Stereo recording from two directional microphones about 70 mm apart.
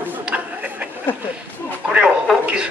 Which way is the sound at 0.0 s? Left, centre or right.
Right.